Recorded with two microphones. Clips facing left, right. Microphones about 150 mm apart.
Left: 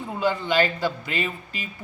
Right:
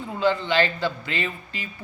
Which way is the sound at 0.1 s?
15° left (ahead or behind).